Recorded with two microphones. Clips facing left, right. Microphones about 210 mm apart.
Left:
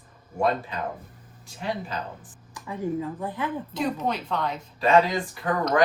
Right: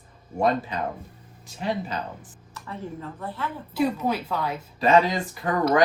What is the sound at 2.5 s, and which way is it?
Speech, 10° left (ahead or behind).